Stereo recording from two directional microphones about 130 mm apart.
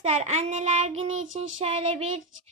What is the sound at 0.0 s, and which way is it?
Child singing, 60° right (ahead or behind).